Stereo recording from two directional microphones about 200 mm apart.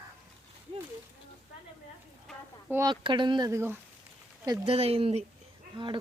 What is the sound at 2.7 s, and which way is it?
Speech, 20° right (ahead or behind).